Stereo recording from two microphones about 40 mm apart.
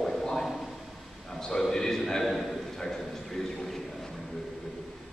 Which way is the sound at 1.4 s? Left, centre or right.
Centre.